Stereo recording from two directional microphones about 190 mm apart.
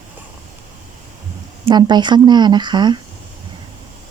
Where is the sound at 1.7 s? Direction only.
20° right (ahead or behind).